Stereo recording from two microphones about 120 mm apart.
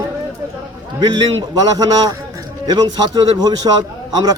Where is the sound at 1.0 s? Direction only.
35° right (ahead or behind).